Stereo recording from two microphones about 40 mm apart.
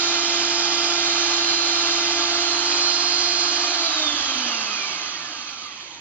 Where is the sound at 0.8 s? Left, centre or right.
Left.